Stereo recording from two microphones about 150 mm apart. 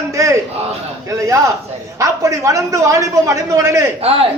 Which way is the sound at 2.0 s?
20° right (ahead or behind).